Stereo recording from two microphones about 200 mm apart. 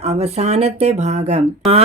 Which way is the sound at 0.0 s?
30° right (ahead or behind).